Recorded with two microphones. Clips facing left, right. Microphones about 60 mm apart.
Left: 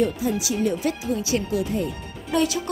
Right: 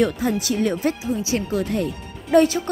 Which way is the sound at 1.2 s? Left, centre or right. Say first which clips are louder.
Right 1 dB; right.